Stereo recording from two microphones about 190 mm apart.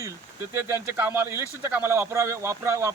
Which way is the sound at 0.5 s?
15° right (ahead or behind).